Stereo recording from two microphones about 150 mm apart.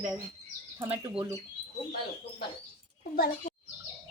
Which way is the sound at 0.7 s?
20° right (ahead or behind).